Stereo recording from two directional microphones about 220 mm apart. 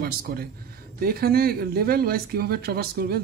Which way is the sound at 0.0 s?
40° right (ahead or behind).